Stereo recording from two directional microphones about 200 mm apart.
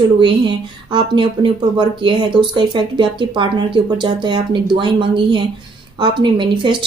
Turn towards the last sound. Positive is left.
turn(degrees=-25)  # may be behind; listen again after turning